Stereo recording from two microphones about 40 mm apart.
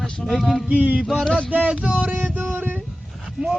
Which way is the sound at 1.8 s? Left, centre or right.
Right.